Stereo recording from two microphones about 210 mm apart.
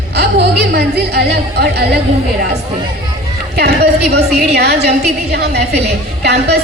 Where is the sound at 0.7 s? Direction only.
50° right (ahead or behind).